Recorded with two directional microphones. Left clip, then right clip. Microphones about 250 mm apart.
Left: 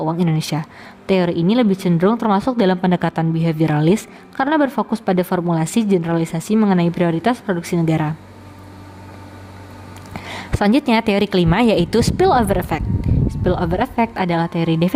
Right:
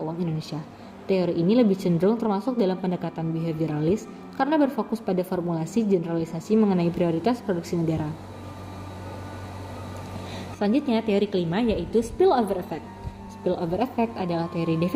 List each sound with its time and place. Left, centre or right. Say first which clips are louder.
0.0 s a woman's voice: left 10 dB; left
10.3 s a woman's voice: left 8 dB; left